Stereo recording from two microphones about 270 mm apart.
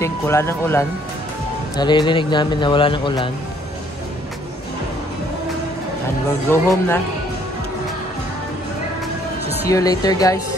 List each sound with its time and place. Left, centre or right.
0.0 s a man's voice: centre
6.5 s a man's voice: centre
9.7 s a man's voice: centre